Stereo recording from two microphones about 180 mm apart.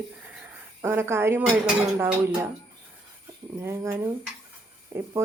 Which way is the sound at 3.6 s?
15° right (ahead or behind).